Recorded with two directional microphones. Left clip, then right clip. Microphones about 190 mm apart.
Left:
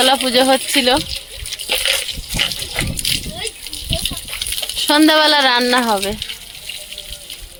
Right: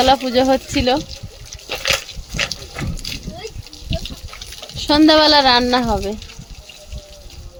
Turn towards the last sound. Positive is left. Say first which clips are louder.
# left 2 dB
turn(degrees=0)  # may be behind; listen again after turning